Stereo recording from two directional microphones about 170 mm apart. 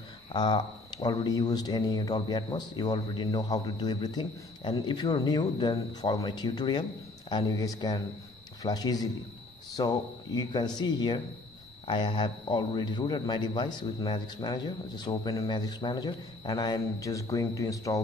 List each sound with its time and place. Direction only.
0.3 s speech: 25° left (ahead or behind)